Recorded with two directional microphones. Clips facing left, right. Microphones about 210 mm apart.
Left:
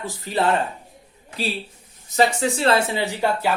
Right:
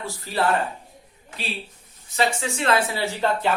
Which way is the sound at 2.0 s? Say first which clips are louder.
Left 5 dB; 40° left (ahead or behind).